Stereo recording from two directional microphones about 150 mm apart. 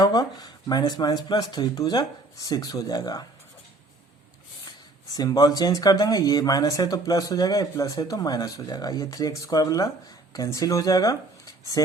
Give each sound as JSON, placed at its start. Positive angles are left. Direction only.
{"t": 0.0, "sound": "speech", "side_deg": 25}
{"t": 5.1, "sound": "speech", "side_deg": 25}